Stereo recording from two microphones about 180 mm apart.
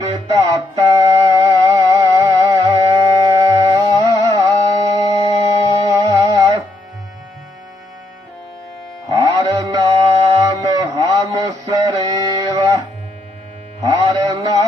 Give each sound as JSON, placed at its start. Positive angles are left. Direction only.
{"t": 0.1, "sound": "music", "side_deg": -20}
{"t": 9.0, "sound": "music", "side_deg": -20}
{"t": 10.3, "sound": "a sound", "side_deg": -20}
{"t": 13.8, "sound": "mantra", "side_deg": -20}